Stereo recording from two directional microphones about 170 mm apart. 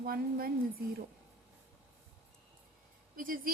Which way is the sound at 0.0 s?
60° right (ahead or behind).